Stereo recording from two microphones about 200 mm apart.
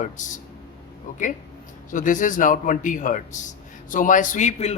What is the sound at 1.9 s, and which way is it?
A man's voice, 40° left (ahead or behind).